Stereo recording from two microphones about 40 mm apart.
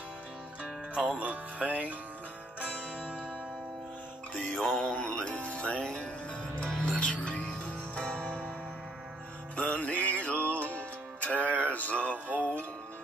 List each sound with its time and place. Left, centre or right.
0.9 s music: right
4.7 s music: left
5.0 s music: left
9.6 s music: left